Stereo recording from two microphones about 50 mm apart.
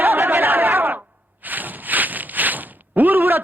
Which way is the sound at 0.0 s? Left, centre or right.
Right.